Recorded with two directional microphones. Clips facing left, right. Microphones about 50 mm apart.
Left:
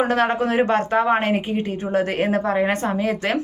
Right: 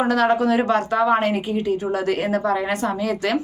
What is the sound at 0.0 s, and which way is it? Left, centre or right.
A woman's voice, left.